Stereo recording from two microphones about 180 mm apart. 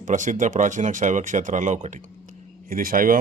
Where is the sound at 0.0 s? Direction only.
45° right (ahead or behind).